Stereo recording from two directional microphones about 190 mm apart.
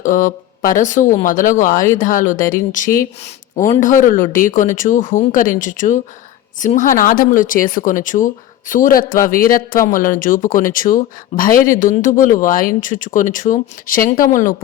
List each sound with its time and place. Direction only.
0.0 s speech: 45° left (ahead or behind)